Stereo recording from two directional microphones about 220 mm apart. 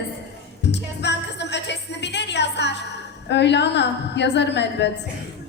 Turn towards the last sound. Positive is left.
turn(degrees=50)  # may be behind; listen again after turning